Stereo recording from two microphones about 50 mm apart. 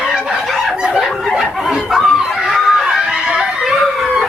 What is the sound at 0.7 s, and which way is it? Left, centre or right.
Snicker, centre.